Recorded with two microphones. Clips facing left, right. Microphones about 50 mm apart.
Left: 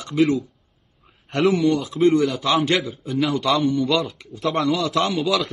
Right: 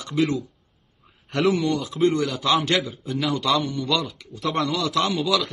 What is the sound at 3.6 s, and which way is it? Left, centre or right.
Speech, centre.